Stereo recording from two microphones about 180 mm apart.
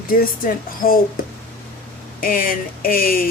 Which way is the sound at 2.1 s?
50° left (ahead or behind).